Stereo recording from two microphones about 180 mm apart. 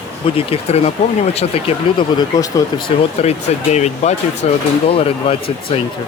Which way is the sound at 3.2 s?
40° left (ahead or behind).